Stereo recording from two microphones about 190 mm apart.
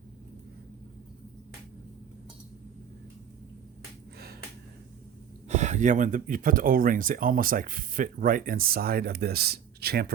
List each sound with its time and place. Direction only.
5.5 s speech: 35° right (ahead or behind); by 10.2 s 55° right (ahead or behind)